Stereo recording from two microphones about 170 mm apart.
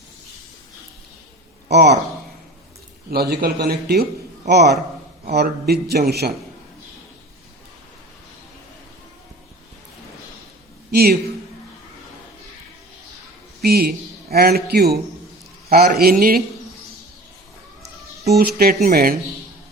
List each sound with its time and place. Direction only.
1.7 s a man's voice: 75° right (ahead or behind)
3.1 s a man's voice: 65° right (ahead or behind)
10.9 s a man's voice: 65° right (ahead or behind)
13.6 s a man's voice: 65° right (ahead or behind)
18.3 s a man's voice: 65° right (ahead or behind)